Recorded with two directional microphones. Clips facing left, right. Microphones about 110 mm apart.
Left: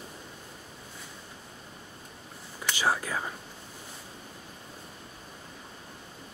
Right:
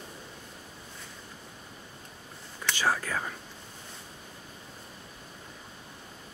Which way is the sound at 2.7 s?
15° left (ahead or behind).